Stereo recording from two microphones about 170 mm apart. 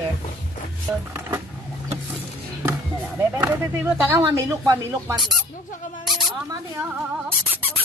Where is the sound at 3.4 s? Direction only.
15° right (ahead or behind).